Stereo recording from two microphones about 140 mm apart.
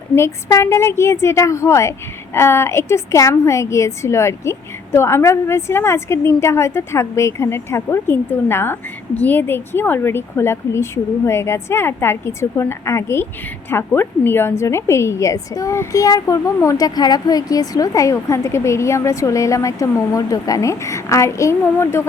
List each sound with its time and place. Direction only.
0.2 s a woman's voice: 20° left (ahead or behind)